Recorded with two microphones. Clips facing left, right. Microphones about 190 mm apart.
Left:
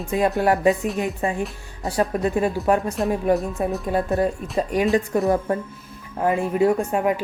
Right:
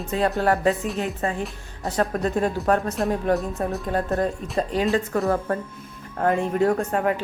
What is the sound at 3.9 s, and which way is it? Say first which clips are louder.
Speech: left 2 dB; 10° left (ahead or behind).